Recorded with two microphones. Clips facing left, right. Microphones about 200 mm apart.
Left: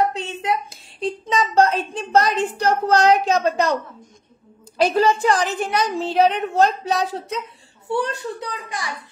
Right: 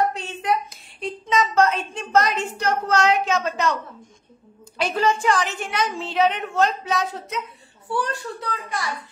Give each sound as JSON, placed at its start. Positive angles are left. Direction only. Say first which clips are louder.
{"t": 0.1, "sound": "a sound", "louder": "left 1 dB", "side_deg": 25}
{"t": 4.7, "sound": "a woman's voice", "louder": "left 5 dB", "side_deg": 35}
{"t": 7.9, "sound": "a child's voice", "louder": "left 3 dB", "side_deg": 20}